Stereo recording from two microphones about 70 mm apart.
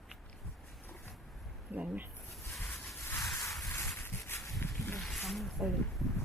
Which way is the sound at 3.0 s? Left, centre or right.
Left.